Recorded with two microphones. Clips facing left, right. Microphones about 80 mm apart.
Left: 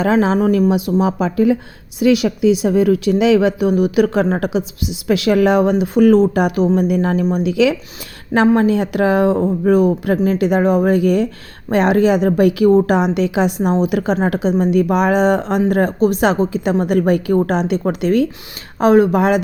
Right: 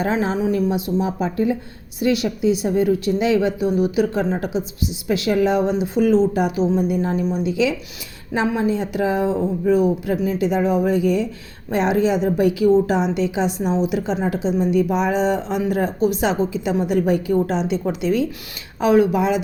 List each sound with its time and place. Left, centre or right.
0.0 s speech: left
0.3 s a woman's voice: left
7.3 s a woman's voice: left